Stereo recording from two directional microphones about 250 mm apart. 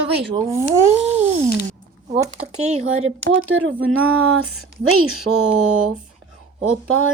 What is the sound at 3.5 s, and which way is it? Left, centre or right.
Speech, right.